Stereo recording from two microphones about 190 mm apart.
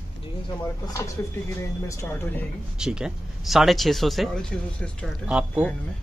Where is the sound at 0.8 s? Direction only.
15° left (ahead or behind).